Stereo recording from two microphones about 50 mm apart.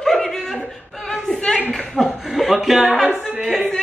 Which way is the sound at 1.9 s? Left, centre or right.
Centre.